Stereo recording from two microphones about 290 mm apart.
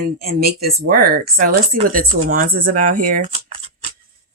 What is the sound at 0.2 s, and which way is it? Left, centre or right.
Speech, right.